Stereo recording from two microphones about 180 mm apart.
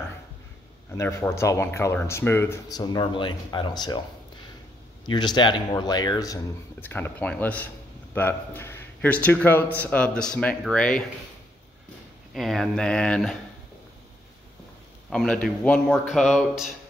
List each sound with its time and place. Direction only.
0.9 s speech: 15° left (ahead or behind)
2.8 s speech: 25° left (ahead or behind)
5.0 s speech: 25° left (ahead or behind); by 11.1 s 5° left (ahead or behind)
12.4 s a man's voice: centre (ahead or behind)
15.0 s a man's voice: 5° left (ahead or behind)